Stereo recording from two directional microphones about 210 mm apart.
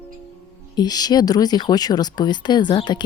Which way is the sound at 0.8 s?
20° left (ahead or behind).